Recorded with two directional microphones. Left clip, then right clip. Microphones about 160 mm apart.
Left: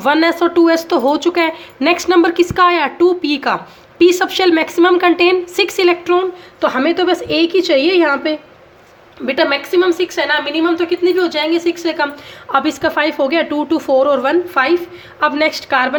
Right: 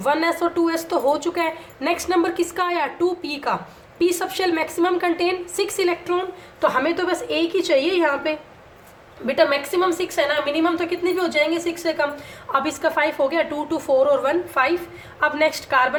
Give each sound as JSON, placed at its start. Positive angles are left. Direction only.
{"t": 0.0, "sound": "speech", "side_deg": 45}
{"t": 9.2, "sound": "speech", "side_deg": 45}
{"t": 12.5, "sound": "a woman's voice", "side_deg": 35}